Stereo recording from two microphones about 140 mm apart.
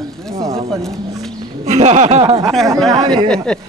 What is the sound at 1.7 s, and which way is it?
Speech, 55° right (ahead or behind).